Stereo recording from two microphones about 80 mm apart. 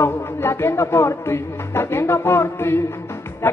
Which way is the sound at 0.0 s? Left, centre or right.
Left.